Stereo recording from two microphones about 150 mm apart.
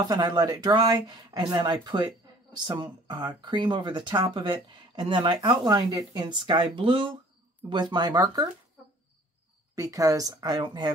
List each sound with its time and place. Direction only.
0.0 s speech: 25° right (ahead or behind)
9.8 s speech: 20° right (ahead or behind)